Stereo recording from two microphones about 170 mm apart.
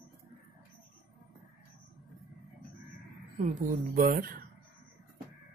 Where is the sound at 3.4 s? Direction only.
45° right (ahead or behind).